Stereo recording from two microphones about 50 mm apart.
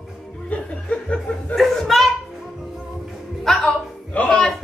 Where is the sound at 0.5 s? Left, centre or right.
Left.